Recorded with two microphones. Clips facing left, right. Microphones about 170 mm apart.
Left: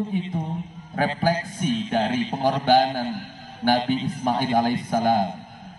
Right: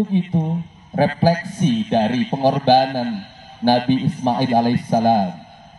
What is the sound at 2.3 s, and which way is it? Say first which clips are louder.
Speech: right 4 dB; 25° right (ahead or behind).